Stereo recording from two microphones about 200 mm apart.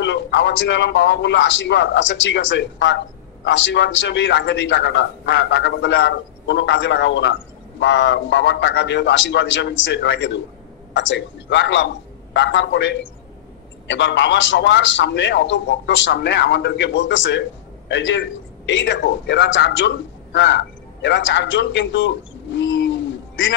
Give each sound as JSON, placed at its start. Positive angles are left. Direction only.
{"t": 0.0, "sound": "a man's voice", "side_deg": 65}